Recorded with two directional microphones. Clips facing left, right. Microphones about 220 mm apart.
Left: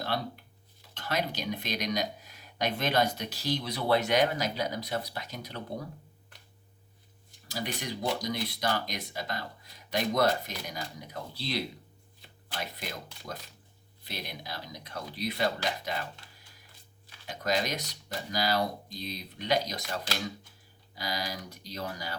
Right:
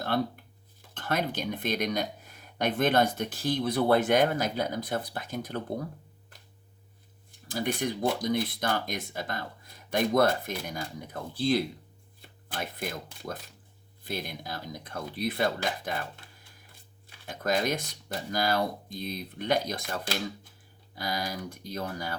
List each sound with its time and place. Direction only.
0.1 s speech: 55° right (ahead or behind)
7.3 s speech: 50° right (ahead or behind)